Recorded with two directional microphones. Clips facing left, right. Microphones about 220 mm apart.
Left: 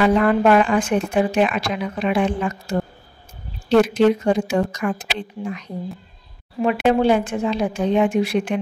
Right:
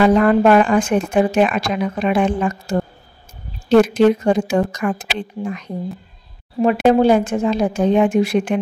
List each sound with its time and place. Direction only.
0.0 s speech: 40° right (ahead or behind)
6.6 s speech: 40° right (ahead or behind)